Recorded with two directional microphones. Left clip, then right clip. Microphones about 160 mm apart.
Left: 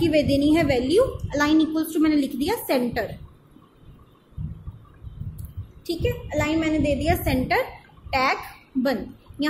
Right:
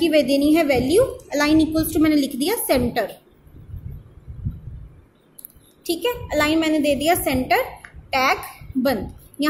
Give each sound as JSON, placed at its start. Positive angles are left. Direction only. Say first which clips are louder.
{"t": 0.0, "sound": "a woman's voice", "louder": "right 3 dB", "side_deg": -10}
{"t": 5.9, "sound": "a woman's voice", "louder": "right 4 dB", "side_deg": -30}